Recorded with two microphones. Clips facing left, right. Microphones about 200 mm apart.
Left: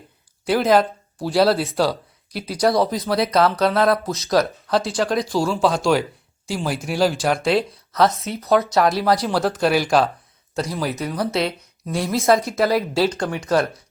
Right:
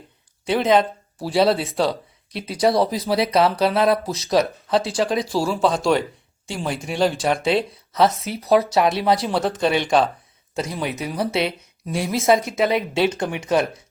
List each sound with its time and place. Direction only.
0.4 s speech: centre (ahead or behind)
13.1 s speech: 20° right (ahead or behind)